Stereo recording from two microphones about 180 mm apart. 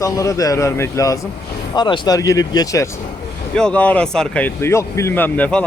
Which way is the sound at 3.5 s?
5° left (ahead or behind).